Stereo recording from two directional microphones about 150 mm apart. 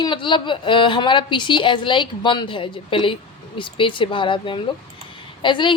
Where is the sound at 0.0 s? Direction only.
30° left (ahead or behind).